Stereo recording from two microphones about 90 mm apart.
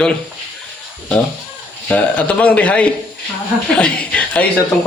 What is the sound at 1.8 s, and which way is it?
A woman's voice, 15° left (ahead or behind).